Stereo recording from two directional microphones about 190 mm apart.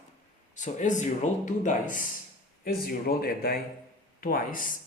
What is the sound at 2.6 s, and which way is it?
Speech, 55° left (ahead or behind).